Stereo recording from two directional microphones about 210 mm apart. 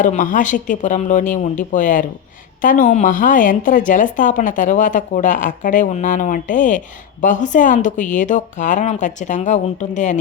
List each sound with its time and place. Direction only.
0.0 s a woman's voice: 40° left (ahead or behind)